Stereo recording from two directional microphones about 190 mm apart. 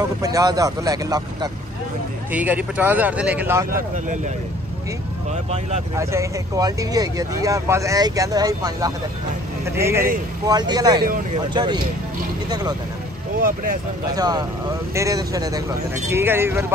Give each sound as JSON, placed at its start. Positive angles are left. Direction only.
{"t": 0.2, "sound": "speech", "side_deg": -20}
{"t": 2.3, "sound": "speech", "side_deg": -10}
{"t": 5.9, "sound": "speech", "side_deg": -15}
{"t": 14.1, "sound": "speech", "side_deg": -20}